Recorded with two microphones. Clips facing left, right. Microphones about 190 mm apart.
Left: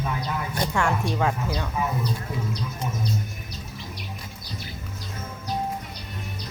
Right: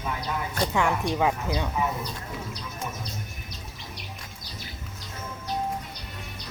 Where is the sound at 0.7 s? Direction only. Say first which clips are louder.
Even; 15° right (ahead or behind).